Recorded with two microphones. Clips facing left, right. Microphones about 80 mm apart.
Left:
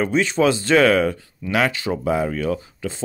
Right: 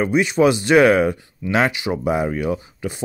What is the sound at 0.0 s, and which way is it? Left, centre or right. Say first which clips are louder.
Speech: right 2 dB; centre.